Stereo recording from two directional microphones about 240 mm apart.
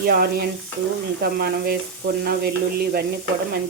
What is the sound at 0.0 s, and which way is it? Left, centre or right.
Frying, right.